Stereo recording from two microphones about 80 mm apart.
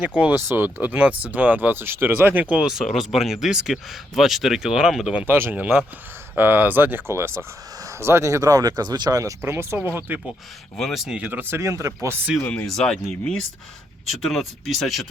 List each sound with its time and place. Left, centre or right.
0.0 s speech: centre
2.8 s speech: centre
5.1 s speech: right
9.4 s speech: right
10.8 s speech: centre
11.2 s speech: right
11.7 s speech: right
12.6 s speech: centre